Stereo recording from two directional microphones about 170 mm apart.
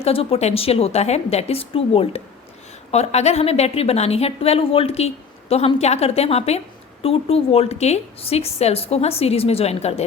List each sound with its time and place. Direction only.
0.0 s a woman's voice: 35° left (ahead or behind)